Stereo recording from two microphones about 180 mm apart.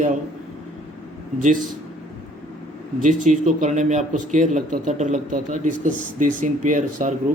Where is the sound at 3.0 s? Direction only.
45° right (ahead or behind).